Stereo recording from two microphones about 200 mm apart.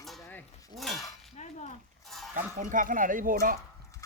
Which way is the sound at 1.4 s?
35° left (ahead or behind).